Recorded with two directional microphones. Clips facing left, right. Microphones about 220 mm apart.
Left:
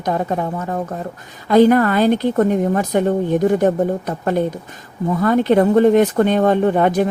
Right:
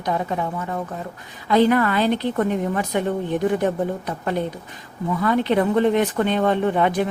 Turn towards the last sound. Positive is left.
turn(degrees=45)  # may be behind; listen again after turning